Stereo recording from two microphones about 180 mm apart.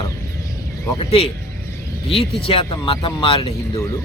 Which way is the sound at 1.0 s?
30° left (ahead or behind).